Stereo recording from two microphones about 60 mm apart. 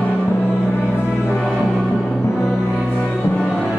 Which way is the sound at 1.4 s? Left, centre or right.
Centre.